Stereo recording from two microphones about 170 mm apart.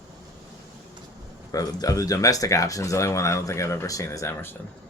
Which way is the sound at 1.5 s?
20° left (ahead or behind).